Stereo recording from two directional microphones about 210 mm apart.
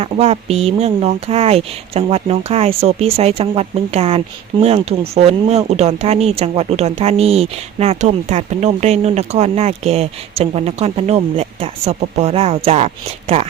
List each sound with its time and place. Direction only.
0.0 s speech: 30° right (ahead or behind)